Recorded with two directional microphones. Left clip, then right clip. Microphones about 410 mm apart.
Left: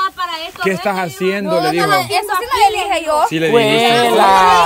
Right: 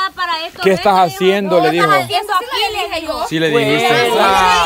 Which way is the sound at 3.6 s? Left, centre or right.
Left.